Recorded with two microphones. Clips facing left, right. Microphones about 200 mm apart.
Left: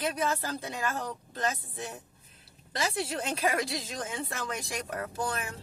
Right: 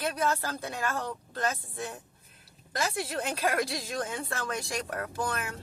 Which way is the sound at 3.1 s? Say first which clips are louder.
Even; 20° left (ahead or behind).